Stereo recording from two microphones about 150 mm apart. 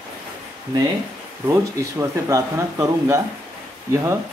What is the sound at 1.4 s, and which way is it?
Speech, 20° right (ahead or behind).